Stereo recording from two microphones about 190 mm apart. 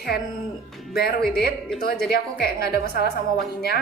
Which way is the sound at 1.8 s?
55° left (ahead or behind).